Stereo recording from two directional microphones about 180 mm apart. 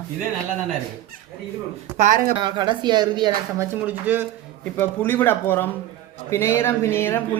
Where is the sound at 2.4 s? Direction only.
25° right (ahead or behind).